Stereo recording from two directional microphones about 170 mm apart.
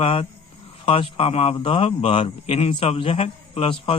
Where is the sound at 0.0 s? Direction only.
35° left (ahead or behind).